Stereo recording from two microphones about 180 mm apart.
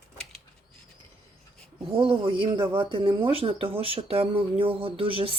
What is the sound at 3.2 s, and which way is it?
Speech, 30° right (ahead or behind).